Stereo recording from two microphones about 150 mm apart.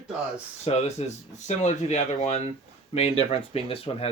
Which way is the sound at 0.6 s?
45° left (ahead or behind).